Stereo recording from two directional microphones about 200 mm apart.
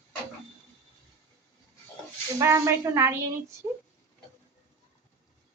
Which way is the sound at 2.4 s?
15° right (ahead or behind).